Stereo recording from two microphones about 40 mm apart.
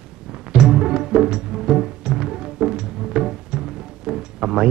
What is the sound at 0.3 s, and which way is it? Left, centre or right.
Music, centre.